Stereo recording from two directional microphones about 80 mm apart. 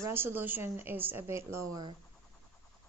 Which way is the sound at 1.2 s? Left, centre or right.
Right.